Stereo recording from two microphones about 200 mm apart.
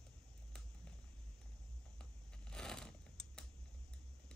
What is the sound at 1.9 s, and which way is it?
Shuffling cards, 5° left (ahead or behind).